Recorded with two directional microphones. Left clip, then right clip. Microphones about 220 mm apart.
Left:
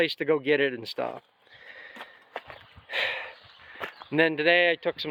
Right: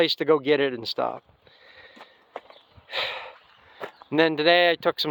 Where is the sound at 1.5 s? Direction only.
5° right (ahead or behind).